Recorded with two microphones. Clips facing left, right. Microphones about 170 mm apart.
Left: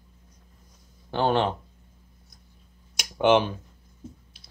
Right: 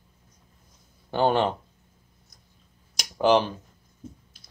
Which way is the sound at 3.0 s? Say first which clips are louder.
Even; centre (ahead or behind).